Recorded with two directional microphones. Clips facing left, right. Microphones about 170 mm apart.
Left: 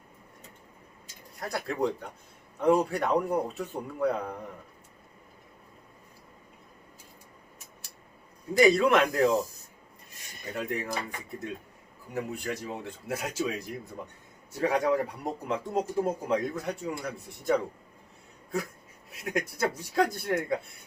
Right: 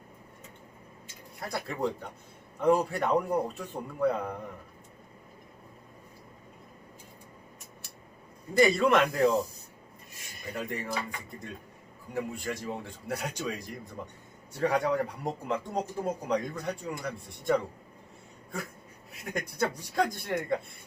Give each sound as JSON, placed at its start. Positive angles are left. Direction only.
{"t": 1.4, "sound": "speech", "side_deg": 0}
{"t": 8.5, "sound": "speech", "side_deg": 0}
{"t": 10.5, "sound": "speech", "side_deg": 0}
{"t": 19.1, "sound": "speech", "side_deg": 0}